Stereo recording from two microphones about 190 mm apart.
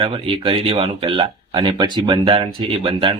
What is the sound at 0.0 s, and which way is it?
Speech, 30° right (ahead or behind).